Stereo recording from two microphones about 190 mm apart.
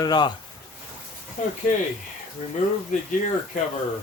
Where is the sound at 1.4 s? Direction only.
45° left (ahead or behind).